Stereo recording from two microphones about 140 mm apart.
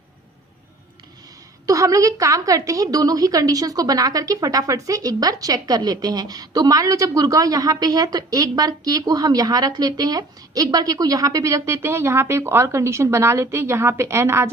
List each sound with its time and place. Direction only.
1.6 s a woman's voice: 25° right (ahead or behind)